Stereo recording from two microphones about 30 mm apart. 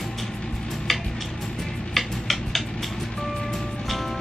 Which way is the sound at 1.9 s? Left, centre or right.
Centre.